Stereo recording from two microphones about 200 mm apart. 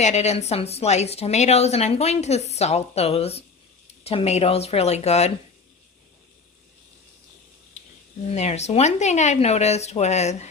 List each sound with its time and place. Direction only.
0.0 s a woman's voice: 35° left (ahead or behind)
8.3 s a woman's voice: 35° left (ahead or behind)